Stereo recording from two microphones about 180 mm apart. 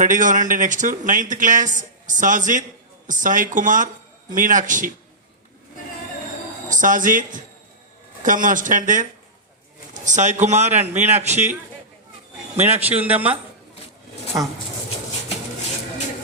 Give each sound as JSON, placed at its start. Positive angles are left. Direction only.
{"t": 0.0, "sound": "speech", "side_deg": -45}
{"t": 6.7, "sound": "a man's voice", "side_deg": -45}
{"t": 12.5, "sound": "a man's voice", "side_deg": -35}
{"t": 13.0, "sound": "speech", "side_deg": -10}